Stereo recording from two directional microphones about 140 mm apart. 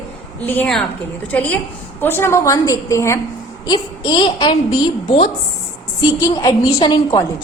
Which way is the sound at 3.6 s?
30° left (ahead or behind).